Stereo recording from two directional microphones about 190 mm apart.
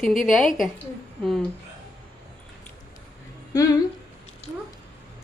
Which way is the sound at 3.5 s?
20° left (ahead or behind).